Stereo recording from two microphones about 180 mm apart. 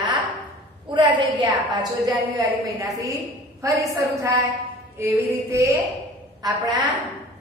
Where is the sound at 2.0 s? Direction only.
20° right (ahead or behind).